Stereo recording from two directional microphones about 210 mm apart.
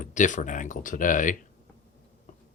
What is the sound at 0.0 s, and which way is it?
Speech, 35° left (ahead or behind).